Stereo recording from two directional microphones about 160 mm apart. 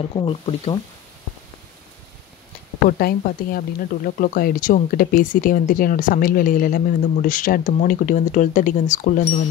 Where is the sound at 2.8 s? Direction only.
65° left (ahead or behind).